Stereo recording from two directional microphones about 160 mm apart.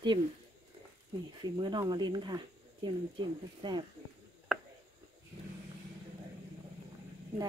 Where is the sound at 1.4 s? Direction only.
25° right (ahead or behind).